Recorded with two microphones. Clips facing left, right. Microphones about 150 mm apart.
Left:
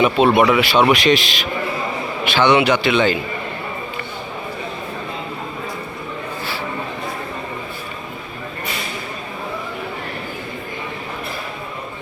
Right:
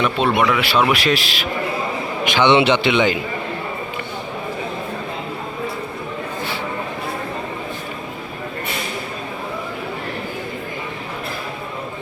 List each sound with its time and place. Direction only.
0.0 s speech: 5° left (ahead or behind)
2.2 s a man's voice: 20° right (ahead or behind)